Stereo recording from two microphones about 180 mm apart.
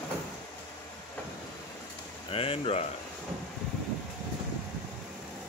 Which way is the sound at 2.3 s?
30° left (ahead or behind).